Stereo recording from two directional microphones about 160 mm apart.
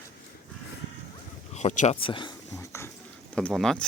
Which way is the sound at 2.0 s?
30° left (ahead or behind).